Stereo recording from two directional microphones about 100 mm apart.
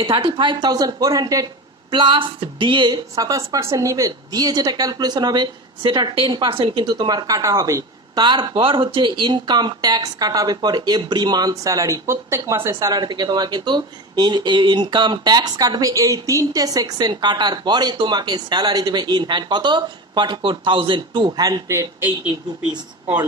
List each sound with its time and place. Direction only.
0.0 s speech: 55° right (ahead or behind); by 12.7 s 30° right (ahead or behind)
13.0 s speech: 45° right (ahead or behind)